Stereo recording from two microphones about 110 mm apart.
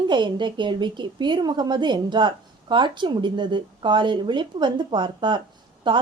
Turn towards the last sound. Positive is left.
turn(degrees=-45)  # may be behind; listen again after turning